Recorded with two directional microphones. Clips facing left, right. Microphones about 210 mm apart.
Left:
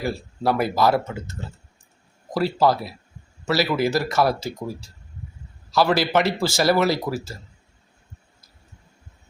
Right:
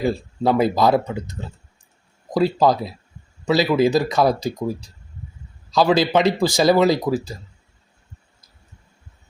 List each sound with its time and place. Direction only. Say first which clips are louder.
0.0 s speech: right 4 dB; 20° right (ahead or behind)